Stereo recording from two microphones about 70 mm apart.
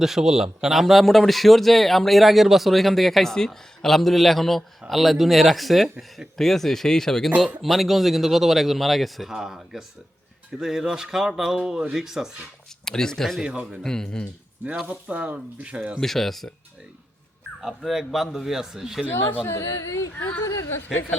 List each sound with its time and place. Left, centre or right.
0.0 s a man's voice: centre
12.8 s speech: centre
13.4 s a man's voice: centre
13.8 s speech: centre
14.8 s speech: centre
16.0 s a man's voice: centre
17.6 s a man's voice: centre
19.0 s speech: left
19.5 s speech: left
20.4 s speech: left